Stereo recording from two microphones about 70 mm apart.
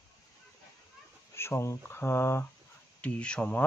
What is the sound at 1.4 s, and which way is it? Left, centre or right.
Speech, left.